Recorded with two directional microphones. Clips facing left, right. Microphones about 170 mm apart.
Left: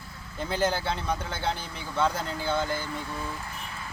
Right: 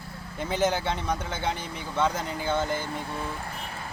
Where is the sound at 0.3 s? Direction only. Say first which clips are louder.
Right 1 dB; centre (ahead or behind).